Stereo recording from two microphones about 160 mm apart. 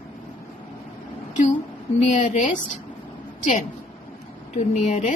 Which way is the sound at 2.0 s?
50° left (ahead or behind).